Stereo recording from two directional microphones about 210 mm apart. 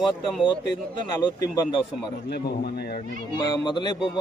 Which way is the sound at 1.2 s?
20° left (ahead or behind).